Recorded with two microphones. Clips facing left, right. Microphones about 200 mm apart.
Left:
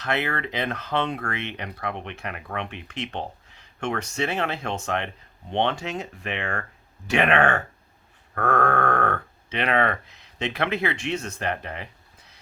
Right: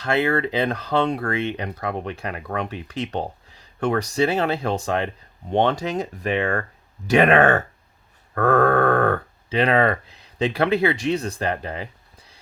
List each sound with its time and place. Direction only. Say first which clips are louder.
0.0 s speech: right 6 dB; 30° right (ahead or behind)